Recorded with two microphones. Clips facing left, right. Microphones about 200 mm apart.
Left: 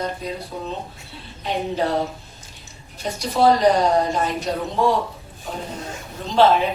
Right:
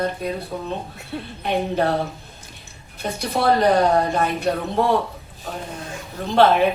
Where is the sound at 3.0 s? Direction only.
55° right (ahead or behind).